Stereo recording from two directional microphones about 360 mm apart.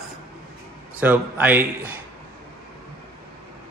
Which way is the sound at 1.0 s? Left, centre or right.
Centre.